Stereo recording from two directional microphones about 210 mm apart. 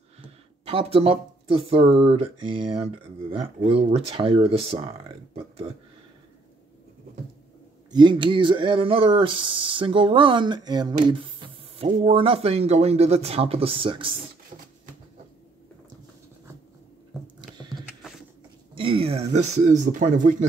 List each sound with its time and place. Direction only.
0.7 s speech: 25° right (ahead or behind)
7.9 s speech: 20° right (ahead or behind)
14.5 s a sound: 30° right (ahead or behind)
17.4 s horse: 20° right (ahead or behind)
18.8 s speech: 25° right (ahead or behind)